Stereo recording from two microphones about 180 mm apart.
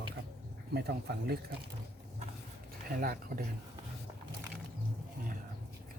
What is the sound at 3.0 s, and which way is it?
Speech, 55° right (ahead or behind).